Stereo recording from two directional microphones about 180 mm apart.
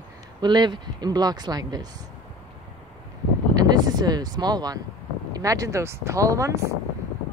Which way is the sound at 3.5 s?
20° right (ahead or behind).